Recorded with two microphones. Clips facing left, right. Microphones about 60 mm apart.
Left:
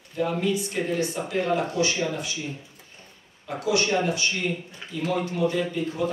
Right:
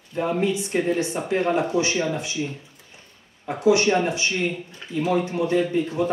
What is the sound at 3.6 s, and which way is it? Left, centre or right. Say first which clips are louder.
Speech: right 5 dB; right.